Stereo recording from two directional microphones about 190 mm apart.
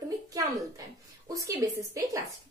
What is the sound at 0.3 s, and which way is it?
A woman's voice, 20° right (ahead or behind).